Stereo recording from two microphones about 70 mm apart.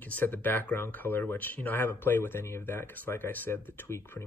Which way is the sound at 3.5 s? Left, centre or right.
Left.